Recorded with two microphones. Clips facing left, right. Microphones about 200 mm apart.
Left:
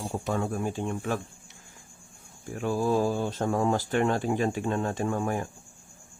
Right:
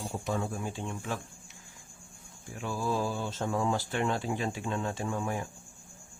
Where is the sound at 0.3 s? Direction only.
60° left (ahead or behind).